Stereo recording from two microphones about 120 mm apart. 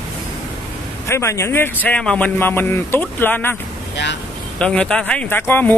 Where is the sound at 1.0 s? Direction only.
20° left (ahead or behind).